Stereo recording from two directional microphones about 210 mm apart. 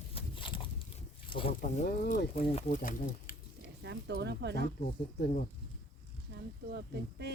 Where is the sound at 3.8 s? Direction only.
55° right (ahead or behind).